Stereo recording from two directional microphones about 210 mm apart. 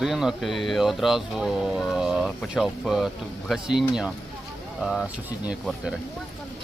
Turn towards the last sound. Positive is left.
turn(degrees=-5)  # may be behind; listen again after turning